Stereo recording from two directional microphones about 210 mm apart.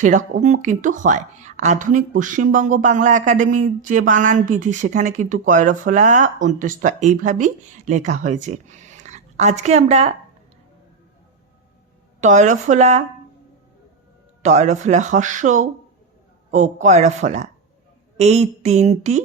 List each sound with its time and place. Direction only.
0.4 s a woman's voice: 35° right (ahead or behind)
12.2 s a woman's voice: 35° right (ahead or behind)
14.4 s a woman's voice: 35° right (ahead or behind)